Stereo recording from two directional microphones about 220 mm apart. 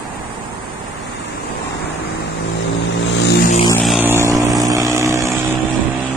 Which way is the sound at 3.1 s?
50° left (ahead or behind).